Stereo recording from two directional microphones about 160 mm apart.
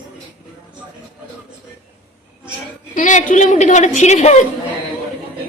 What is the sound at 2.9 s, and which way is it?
A woman's voice, 50° left (ahead or behind).